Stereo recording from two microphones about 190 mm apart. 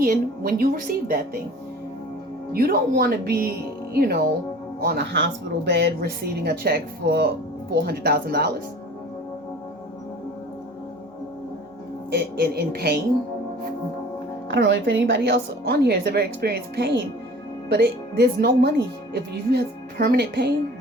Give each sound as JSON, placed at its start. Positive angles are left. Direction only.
{"t": 0.0, "sound": "a woman's voice", "side_deg": -50}
{"t": 2.5, "sound": "a woman's voice", "side_deg": -50}
{"t": 12.1, "sound": "speech", "side_deg": -55}
{"t": 14.4, "sound": "speech", "side_deg": -70}